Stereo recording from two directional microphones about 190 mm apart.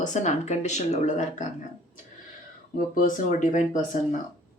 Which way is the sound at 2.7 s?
45° left (ahead or behind).